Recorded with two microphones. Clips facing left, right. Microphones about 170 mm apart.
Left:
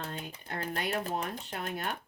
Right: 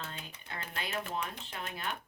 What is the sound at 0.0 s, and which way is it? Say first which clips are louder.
Typewriter: left 5 dB; 45° left (ahead or behind).